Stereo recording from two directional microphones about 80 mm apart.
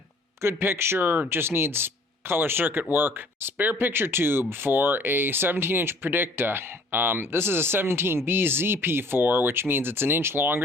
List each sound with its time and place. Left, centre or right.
0.4 s speech: right